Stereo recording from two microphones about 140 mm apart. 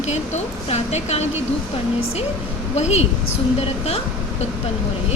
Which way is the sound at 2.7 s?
50° left (ahead or behind).